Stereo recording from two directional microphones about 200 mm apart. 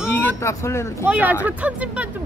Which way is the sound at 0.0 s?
10° left (ahead or behind).